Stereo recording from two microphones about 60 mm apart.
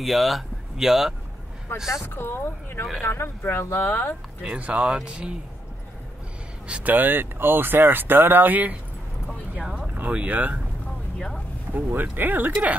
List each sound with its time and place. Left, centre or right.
0.0 s speech: centre
1.7 s speech: left
4.4 s speech: right
4.8 s speech: centre
6.7 s speech: right
9.9 s speech: right
11.1 s a sound: centre
11.7 s speech: right